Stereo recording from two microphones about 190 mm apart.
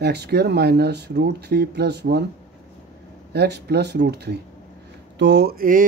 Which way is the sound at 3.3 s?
60° right (ahead or behind).